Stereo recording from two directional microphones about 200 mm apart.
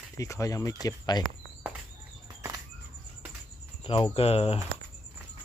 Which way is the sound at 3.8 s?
30° left (ahead or behind).